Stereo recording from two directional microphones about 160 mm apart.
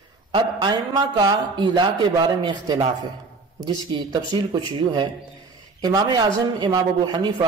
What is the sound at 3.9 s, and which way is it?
Speech, 30° right (ahead or behind).